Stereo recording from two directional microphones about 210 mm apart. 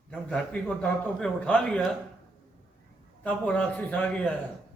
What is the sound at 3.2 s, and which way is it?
A man's voice, 5° left (ahead or behind).